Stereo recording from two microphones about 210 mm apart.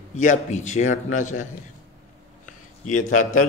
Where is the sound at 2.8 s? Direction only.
40° left (ahead or behind).